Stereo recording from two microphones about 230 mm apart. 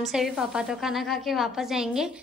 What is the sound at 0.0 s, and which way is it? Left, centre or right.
A woman's voice, centre.